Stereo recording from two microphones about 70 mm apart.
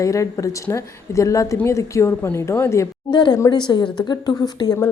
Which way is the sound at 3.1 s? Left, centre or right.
Left.